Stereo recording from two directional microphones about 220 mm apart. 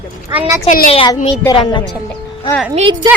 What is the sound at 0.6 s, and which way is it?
Speech, 40° left (ahead or behind).